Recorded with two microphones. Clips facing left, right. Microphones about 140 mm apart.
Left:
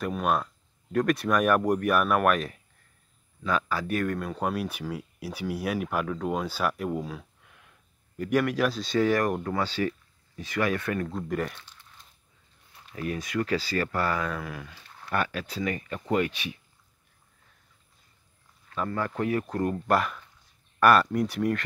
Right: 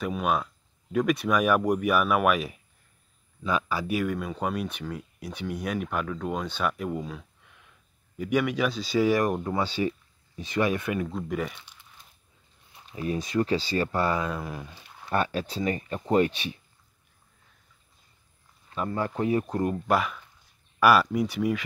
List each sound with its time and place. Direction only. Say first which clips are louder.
0.0 s speech: even; centre (ahead or behind)
11.1 s speech: even; centre (ahead or behind)
11.5 s crumpling: even; 10° right (ahead or behind)
12.7 s speech: right 2 dB; 25° right (ahead or behind)
18.7 s speech: right 1 dB; 20° right (ahead or behind)
19.9 s speech: even; centre (ahead or behind)